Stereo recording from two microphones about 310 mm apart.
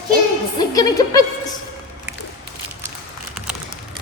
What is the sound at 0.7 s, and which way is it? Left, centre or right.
Music, centre.